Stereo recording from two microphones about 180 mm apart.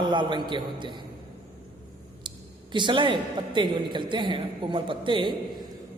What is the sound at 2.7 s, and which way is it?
A woman's voice, 25° right (ahead or behind).